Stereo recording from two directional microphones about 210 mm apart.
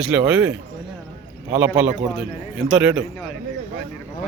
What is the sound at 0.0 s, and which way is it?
A man's voice, 5° right (ahead or behind).